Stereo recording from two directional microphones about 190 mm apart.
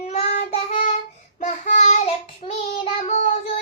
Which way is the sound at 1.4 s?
40° left (ahead or behind).